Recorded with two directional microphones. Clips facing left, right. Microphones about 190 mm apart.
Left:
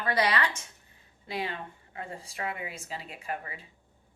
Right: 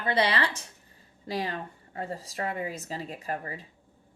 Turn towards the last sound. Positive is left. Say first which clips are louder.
# right 3 dB
turn(degrees=-40)  # may be behind; listen again after turning